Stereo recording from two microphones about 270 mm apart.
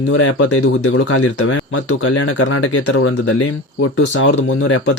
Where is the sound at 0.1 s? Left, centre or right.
Left.